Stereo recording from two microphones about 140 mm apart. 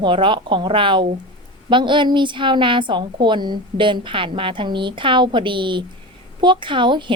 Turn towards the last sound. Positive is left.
turn(degrees=-35)  # may be behind; listen again after turning